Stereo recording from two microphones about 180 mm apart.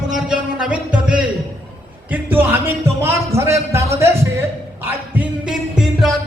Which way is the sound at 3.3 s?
15° right (ahead or behind).